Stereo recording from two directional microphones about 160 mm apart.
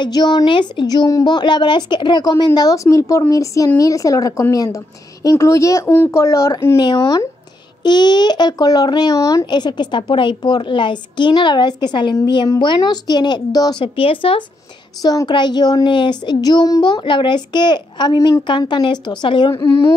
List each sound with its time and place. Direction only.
0.0 s speech: 25° left (ahead or behind)
15.0 s speech: 25° left (ahead or behind)